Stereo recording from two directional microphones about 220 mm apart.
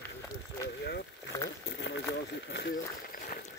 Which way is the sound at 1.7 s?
50° left (ahead or behind).